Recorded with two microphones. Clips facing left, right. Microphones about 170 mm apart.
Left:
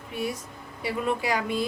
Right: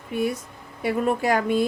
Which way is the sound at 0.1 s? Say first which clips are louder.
Right 6 dB; 55° right (ahead or behind).